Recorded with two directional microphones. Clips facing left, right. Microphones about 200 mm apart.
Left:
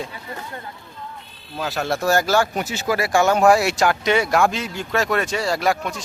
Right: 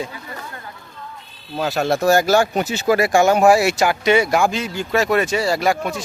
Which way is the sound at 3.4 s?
5° right (ahead or behind).